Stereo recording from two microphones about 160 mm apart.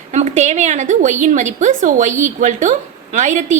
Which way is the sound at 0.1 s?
45° right (ahead or behind).